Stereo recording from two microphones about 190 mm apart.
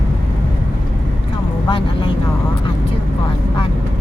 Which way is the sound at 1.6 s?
25° left (ahead or behind).